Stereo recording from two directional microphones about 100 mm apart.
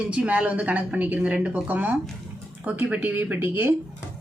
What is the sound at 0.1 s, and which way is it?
A woman's voice, 10° right (ahead or behind).